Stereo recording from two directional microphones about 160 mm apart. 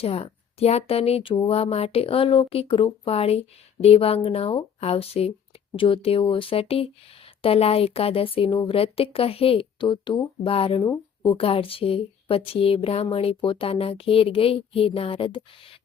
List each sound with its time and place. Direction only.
0.0 s speech: 40° left (ahead or behind)